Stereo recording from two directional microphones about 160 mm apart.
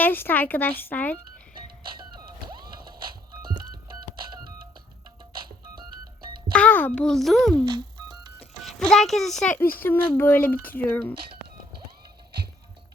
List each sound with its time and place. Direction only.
0.0 s speech: 10° left (ahead or behind)
6.5 s a child's voice: 10° left (ahead or behind)
7.6 s speech: 30° right (ahead or behind)
8.6 s a child's voice: 5° left (ahead or behind)